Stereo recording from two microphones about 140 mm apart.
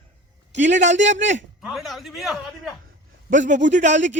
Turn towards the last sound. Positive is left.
turn(degrees=-60)  # may be behind; listen again after turning